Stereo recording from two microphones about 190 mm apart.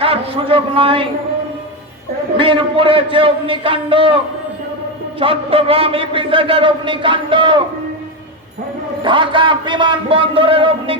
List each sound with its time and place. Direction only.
0.0 s a man's voice: 30° right (ahead or behind)
2.4 s a man's voice: 25° right (ahead or behind)
5.2 s a man's voice: 30° right (ahead or behind)
9.0 s a man's voice: 25° right (ahead or behind)